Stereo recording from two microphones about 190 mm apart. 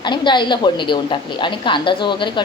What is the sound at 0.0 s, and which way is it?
A woman's voice, 25° left (ahead or behind).